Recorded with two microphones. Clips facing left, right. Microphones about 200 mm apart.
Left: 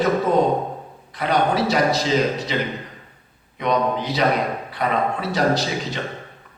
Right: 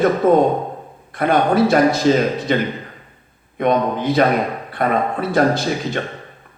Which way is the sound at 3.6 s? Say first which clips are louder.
Right 4 dB; 50° right (ahead or behind).